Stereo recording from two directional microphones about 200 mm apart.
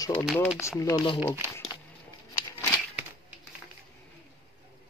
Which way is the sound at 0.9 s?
25° left (ahead or behind).